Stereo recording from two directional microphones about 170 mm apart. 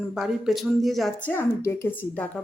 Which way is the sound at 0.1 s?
Centre (ahead or behind).